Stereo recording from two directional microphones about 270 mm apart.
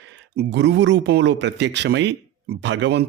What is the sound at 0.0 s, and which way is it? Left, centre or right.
Speech, right.